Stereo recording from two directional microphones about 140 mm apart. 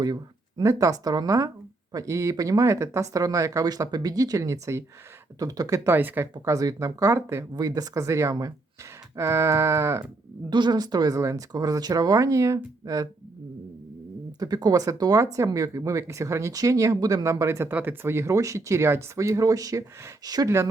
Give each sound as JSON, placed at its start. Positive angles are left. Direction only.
{"t": 0.0, "sound": "speech", "side_deg": -30}
{"t": 10.5, "sound": "speech", "side_deg": -30}
{"t": 14.3, "sound": "speech", "side_deg": -25}